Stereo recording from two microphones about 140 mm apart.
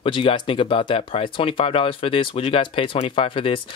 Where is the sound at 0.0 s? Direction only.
40° left (ahead or behind).